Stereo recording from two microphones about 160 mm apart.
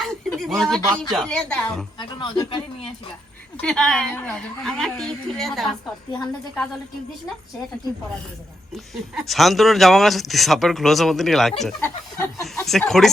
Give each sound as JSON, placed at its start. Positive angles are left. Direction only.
{"t": 0.0, "sound": "a sound", "side_deg": 0}
{"t": 0.9, "sound": "speech", "side_deg": 5}
{"t": 2.0, "sound": "speech", "side_deg": 30}
{"t": 3.6, "sound": "speech", "side_deg": 5}
{"t": 8.7, "sound": "speech", "side_deg": 0}